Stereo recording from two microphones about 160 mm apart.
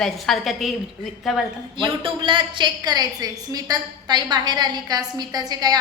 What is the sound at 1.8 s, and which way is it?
A woman's voice, 30° right (ahead or behind).